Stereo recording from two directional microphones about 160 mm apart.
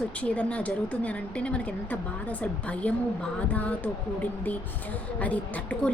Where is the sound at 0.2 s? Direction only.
10° left (ahead or behind).